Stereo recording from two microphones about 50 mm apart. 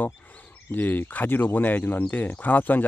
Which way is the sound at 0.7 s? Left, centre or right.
Left.